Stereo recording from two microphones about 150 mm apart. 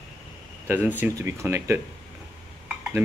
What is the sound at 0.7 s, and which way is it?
Speech, 10° right (ahead or behind).